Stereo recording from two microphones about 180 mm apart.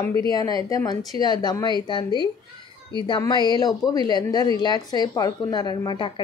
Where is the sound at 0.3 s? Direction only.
20° left (ahead or behind).